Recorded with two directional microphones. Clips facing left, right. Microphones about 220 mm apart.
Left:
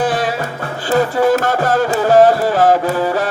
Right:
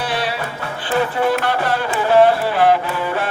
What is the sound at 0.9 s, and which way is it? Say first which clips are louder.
Music: left 5 dB; 40° left (ahead or behind).